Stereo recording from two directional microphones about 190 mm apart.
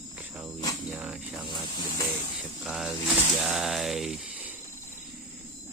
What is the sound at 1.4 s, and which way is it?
Hiss, 25° left (ahead or behind).